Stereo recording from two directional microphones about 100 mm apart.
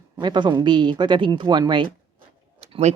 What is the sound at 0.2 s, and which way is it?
Speech, 50° right (ahead or behind).